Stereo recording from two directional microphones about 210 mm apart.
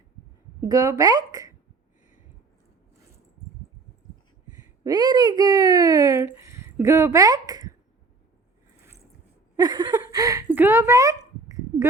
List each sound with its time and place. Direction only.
0.7 s speech: 15° right (ahead or behind)
4.8 s speech: 20° right (ahead or behind)
9.6 s speech: 20° right (ahead or behind)